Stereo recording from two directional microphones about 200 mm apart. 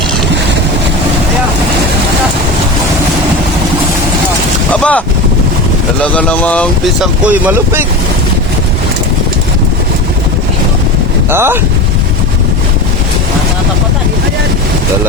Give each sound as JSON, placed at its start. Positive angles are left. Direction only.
{"t": 4.7, "sound": "boat", "side_deg": 5}
{"t": 6.0, "sound": "speech", "side_deg": 5}
{"t": 7.3, "sound": "speech", "side_deg": -10}
{"t": 11.3, "sound": "speech", "side_deg": -10}